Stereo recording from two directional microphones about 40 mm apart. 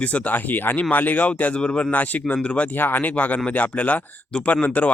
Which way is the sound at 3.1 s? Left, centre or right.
Left.